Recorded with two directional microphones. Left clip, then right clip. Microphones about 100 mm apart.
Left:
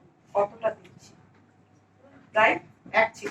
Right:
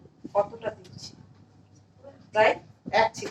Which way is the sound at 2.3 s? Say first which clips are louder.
Even; 35° right (ahead or behind).